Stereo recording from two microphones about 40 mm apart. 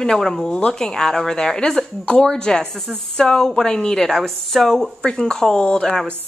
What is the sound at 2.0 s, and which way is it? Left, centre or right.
A woman's voice, centre.